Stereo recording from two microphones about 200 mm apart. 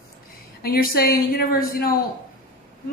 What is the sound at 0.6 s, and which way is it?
A woman's voice, 50° left (ahead or behind).